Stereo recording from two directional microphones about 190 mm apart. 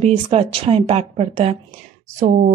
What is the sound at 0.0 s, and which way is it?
A woman's voice, 30° right (ahead or behind).